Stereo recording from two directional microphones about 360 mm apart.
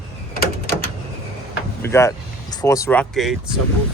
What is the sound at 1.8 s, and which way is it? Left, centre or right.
Speech, centre.